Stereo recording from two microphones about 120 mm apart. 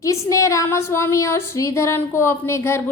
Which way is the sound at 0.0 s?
25° left (ahead or behind).